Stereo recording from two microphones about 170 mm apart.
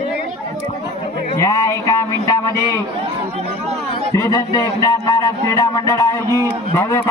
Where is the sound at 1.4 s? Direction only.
20° left (ahead or behind).